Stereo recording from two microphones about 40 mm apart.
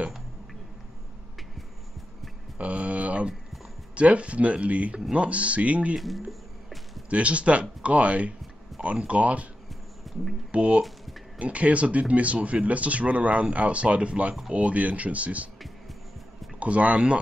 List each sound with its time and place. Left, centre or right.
2.6 s a sound: right
3.9 s speech: right
5.9 s speech: centre
7.1 s speech: right
10.1 s a sound: centre
10.5 s speech: right
16.5 s speech: right